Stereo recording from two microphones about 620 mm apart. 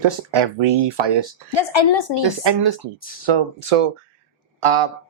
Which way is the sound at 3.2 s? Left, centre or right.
Right.